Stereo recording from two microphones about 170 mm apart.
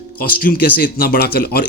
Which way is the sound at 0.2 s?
60° left (ahead or behind).